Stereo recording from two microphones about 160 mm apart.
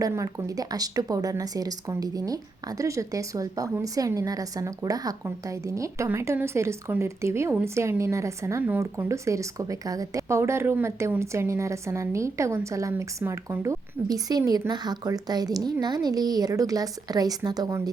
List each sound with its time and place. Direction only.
0.0 s speech: 20° right (ahead or behind)